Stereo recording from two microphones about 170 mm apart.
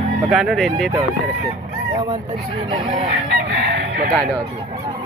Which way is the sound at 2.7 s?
35° right (ahead or behind).